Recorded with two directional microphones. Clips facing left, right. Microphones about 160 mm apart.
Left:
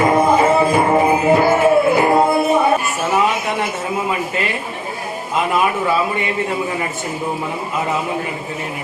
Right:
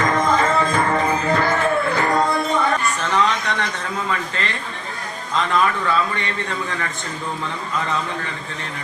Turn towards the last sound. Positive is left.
turn(degrees=15)  # may be behind; listen again after turning